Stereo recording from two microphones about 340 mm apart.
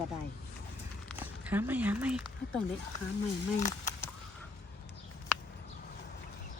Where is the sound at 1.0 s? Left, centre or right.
Centre.